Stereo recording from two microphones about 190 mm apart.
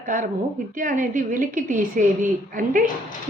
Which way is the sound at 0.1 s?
45° right (ahead or behind).